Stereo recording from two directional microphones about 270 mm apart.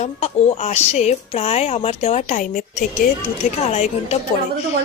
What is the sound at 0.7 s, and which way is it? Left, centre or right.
Speech, left.